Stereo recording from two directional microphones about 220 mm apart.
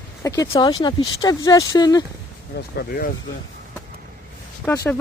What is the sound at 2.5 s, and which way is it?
Speech, 50° left (ahead or behind).